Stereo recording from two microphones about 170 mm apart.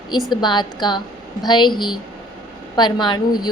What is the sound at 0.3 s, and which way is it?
A woman's voice, 25° left (ahead or behind).